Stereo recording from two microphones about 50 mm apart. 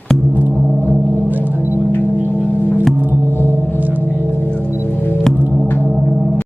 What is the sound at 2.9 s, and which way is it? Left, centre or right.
Music, right.